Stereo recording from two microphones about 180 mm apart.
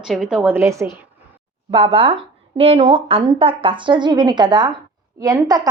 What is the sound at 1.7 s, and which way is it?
A woman's voice, 25° right (ahead or behind).